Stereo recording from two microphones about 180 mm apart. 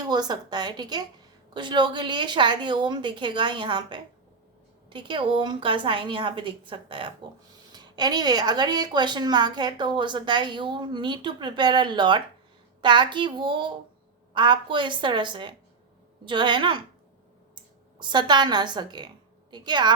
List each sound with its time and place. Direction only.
0.0 s a woman's voice: 20° right (ahead or behind)
18.0 s a woman's voice: 25° right (ahead or behind)